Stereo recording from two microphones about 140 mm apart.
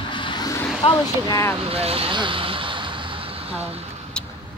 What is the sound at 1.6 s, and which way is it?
Vehicle, 45° right (ahead or behind).